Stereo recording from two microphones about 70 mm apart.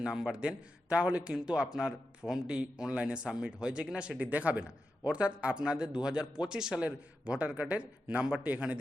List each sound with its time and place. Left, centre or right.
0.0 s a man's voice: centre